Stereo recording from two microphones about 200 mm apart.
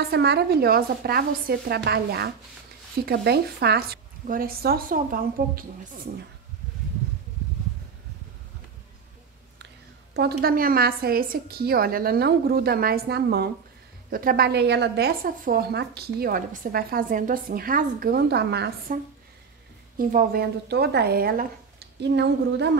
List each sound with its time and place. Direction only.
0.1 s a woman's voice: 55° right (ahead or behind)
10.1 s a woman's voice: 50° right (ahead or behind)
20.0 s a woman's voice: 45° right (ahead or behind)